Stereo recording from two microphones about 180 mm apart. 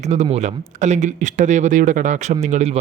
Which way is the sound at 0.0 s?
40° right (ahead or behind).